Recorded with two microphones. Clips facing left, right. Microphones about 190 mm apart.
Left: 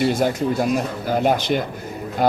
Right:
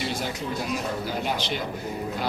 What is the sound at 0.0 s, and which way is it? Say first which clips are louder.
Speech: left 11 dB; 50° left (ahead or behind).